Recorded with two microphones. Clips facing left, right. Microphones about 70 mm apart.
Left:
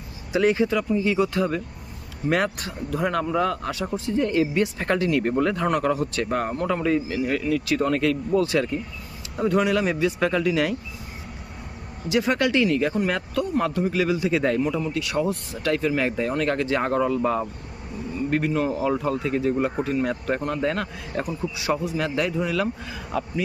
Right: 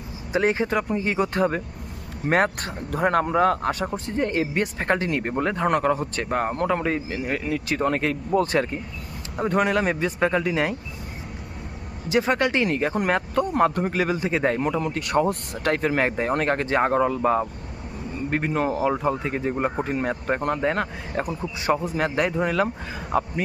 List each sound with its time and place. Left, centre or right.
0.3 s a man's voice: right
12.0 s speech: right
14.6 s a man's voice: right